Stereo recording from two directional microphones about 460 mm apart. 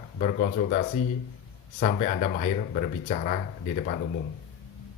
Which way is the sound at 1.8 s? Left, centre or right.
Centre.